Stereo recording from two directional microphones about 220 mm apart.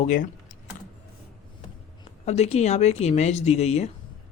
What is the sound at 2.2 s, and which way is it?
Speech, 30° left (ahead or behind).